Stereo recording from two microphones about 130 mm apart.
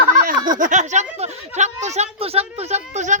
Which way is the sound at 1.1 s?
55° right (ahead or behind).